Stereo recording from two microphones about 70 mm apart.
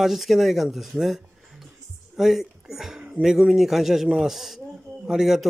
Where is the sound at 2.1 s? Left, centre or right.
Centre.